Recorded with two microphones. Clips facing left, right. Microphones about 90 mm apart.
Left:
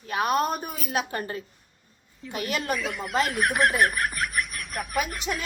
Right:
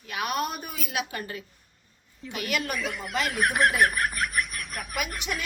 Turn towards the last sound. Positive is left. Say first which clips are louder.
# left 3 dB
turn(degrees=0)  # may be behind; listen again after turning